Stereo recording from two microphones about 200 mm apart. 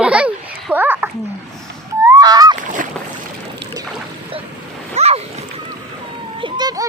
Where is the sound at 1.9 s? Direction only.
15° right (ahead or behind).